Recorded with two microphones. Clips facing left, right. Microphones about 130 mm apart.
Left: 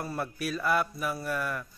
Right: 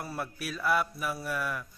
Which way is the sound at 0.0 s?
5° right (ahead or behind).